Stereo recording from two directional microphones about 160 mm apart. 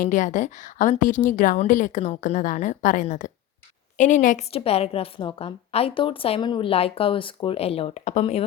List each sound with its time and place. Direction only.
0.0 s a woman's voice: 55° left (ahead or behind)
4.5 s a woman's voice: 40° left (ahead or behind)